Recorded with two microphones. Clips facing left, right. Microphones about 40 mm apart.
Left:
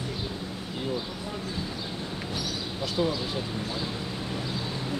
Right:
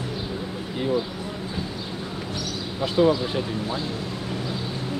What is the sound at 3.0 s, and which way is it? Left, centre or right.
Speech, right.